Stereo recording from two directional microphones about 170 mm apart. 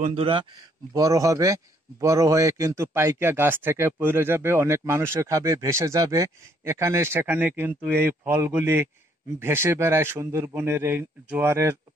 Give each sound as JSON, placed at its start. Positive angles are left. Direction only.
{"t": 0.0, "sound": "speech", "side_deg": -35}
{"t": 0.9, "sound": "a man's voice", "side_deg": -20}